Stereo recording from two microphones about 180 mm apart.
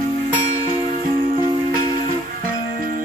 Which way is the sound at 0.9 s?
50° right (ahead or behind).